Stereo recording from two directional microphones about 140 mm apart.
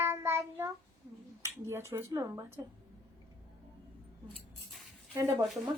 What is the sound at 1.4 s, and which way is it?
Speech, 20° right (ahead or behind).